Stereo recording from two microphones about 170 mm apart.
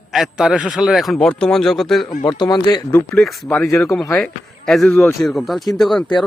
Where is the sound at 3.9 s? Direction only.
5° left (ahead or behind).